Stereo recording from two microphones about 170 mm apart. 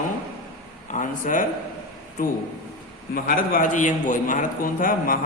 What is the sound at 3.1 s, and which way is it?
A man's voice, 55° left (ahead or behind).